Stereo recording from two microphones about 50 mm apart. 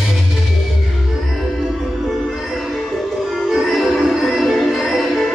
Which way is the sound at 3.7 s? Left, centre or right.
Centre.